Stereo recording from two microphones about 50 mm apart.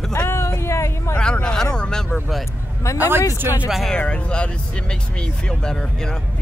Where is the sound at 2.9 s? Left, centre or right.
Right.